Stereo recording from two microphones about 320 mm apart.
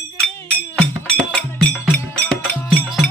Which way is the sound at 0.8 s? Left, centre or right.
Centre.